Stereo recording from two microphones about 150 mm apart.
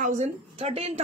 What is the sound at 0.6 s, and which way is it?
Speech, 45° right (ahead or behind).